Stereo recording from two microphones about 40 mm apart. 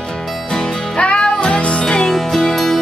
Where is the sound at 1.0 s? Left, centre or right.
Left.